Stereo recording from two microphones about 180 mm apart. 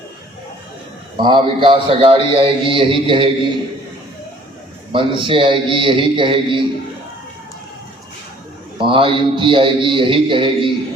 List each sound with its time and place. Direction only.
1.2 s a man's voice: 30° right (ahead or behind)
4.9 s a man's voice: 30° right (ahead or behind)
8.8 s a man's voice: 30° right (ahead or behind)